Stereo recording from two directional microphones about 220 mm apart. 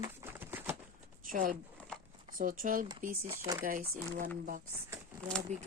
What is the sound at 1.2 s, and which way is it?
Speech, 40° right (ahead or behind).